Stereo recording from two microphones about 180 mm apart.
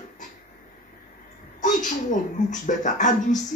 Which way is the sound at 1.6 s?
45° left (ahead or behind).